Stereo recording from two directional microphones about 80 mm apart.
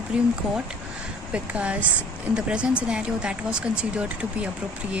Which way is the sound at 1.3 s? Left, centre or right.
Centre.